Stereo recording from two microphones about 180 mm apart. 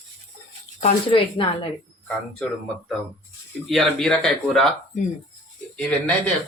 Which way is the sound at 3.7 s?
Centre (ahead or behind).